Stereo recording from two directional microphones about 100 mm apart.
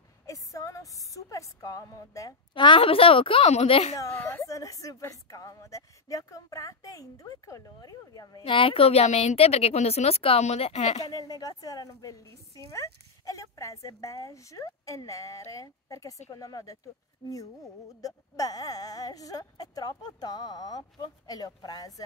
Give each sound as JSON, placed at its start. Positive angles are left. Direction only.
{"t": 0.3, "sound": "music", "side_deg": 35}
{"t": 2.5, "sound": "a woman's voice", "side_deg": 55}
{"t": 4.2, "sound": "a woman's voice", "side_deg": 20}
{"t": 4.5, "sound": "a woman's voice", "side_deg": 35}
{"t": 8.4, "sound": "a woman's voice", "side_deg": 60}
{"t": 11.1, "sound": "a woman's voice", "side_deg": 40}